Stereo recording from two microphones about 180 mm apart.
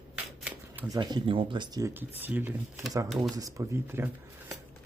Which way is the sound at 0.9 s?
20° right (ahead or behind).